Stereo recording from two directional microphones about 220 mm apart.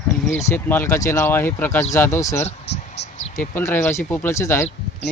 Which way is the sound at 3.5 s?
10° left (ahead or behind).